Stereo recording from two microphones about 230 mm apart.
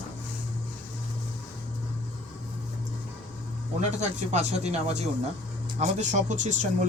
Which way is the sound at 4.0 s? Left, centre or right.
Right.